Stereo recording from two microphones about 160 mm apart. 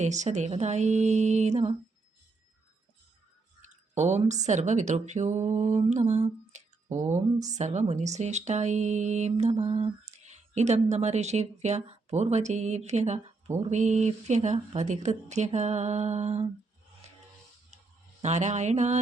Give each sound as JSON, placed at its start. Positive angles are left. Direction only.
{"t": 0.0, "sound": "speech", "side_deg": -45}
{"t": 3.9, "sound": "speech", "side_deg": -45}
{"t": 18.2, "sound": "speech", "side_deg": -45}